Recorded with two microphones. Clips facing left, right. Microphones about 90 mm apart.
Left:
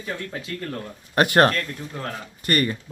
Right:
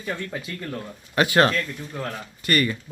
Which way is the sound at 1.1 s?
50° left (ahead or behind).